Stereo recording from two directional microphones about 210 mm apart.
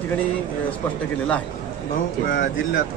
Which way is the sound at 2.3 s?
45° left (ahead or behind).